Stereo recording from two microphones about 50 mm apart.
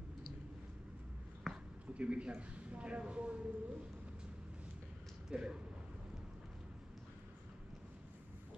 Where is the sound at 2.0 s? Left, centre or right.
Right.